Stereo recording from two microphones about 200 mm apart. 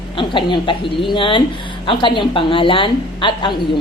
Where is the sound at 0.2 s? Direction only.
25° left (ahead or behind).